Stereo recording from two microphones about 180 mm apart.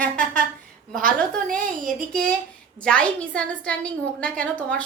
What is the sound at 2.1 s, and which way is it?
A woman's voice, 5° left (ahead or behind).